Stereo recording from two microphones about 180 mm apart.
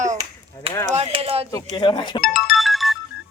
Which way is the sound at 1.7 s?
25° left (ahead or behind).